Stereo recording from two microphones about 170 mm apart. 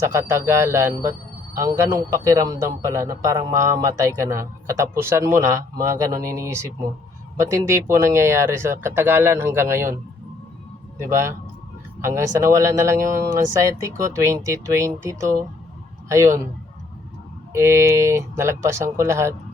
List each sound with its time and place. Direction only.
0.0 s a man's voice: 15° right (ahead or behind)
11.0 s a man's voice: 15° right (ahead or behind)
17.5 s a man's voice: 15° right (ahead or behind)